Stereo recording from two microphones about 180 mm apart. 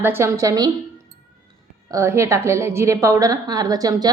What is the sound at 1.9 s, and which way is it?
A woman's voice, 15° right (ahead or behind).